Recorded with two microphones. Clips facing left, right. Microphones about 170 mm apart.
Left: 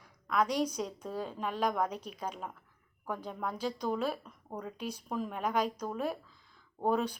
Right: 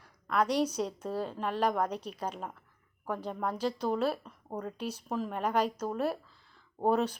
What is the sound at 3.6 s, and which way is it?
Speech, 10° left (ahead or behind).